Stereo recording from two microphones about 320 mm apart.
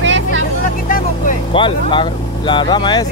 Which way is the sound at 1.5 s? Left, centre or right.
Centre.